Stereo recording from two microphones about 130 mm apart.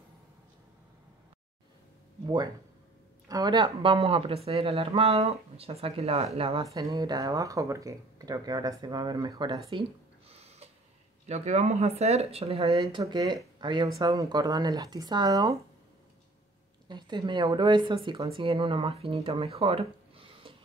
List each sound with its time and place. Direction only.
2.2 s speech: 35° right (ahead or behind)
6.6 s speech: 25° right (ahead or behind)
9.7 s a sound: 45° right (ahead or behind)
11.2 s speech: 60° right (ahead or behind)
13.0 s speech: 30° right (ahead or behind)
16.8 s speech: 35° right (ahead or behind)